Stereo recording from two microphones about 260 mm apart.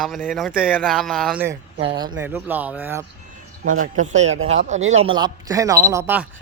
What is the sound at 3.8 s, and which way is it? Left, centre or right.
Speech, right.